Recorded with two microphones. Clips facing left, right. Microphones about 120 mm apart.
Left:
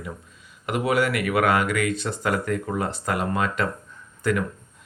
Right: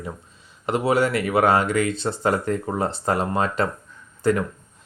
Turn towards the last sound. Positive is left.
turn(degrees=-30)  # may be behind; listen again after turning